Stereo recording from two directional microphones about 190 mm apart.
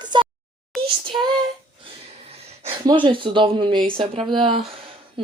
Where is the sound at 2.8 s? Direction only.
25° right (ahead or behind).